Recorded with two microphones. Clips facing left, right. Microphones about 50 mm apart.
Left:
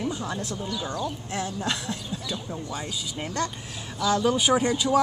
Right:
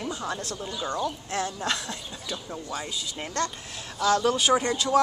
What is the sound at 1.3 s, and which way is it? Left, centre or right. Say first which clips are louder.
Speech: even; centre.